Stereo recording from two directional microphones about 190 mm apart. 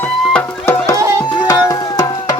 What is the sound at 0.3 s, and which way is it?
Music, 10° left (ahead or behind).